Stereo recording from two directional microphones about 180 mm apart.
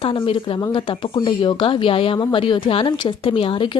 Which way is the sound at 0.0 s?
30° left (ahead or behind).